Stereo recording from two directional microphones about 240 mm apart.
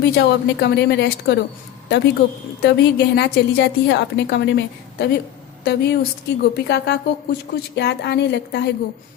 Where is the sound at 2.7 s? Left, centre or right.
Left.